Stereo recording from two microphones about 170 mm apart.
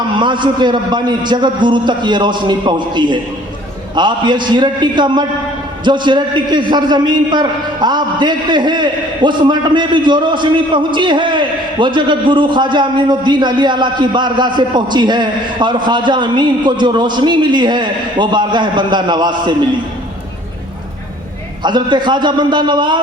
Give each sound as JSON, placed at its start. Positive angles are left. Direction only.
{"t": 0.2, "sound": "a man's voice", "side_deg": -30}
{"t": 21.6, "sound": "a man's voice", "side_deg": -25}